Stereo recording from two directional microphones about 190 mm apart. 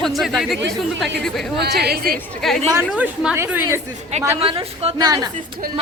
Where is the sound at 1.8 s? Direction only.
55° right (ahead or behind).